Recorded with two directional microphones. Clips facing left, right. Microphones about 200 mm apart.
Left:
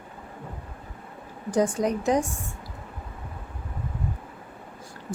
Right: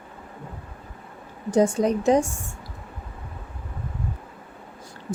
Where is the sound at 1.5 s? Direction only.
25° right (ahead or behind).